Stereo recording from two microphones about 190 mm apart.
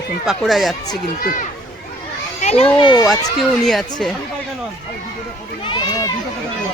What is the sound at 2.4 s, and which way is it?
Children playing, 35° left (ahead or behind).